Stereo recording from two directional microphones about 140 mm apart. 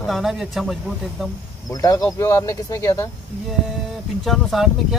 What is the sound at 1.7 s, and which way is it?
Speech, 25° left (ahead or behind).